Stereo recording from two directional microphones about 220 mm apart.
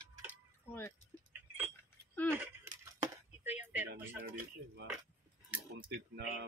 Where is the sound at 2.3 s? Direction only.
10° right (ahead or behind).